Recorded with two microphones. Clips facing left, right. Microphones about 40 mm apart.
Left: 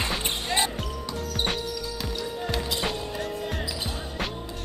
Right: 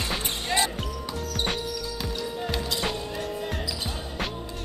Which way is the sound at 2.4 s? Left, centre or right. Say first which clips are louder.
Left 1 dB; centre.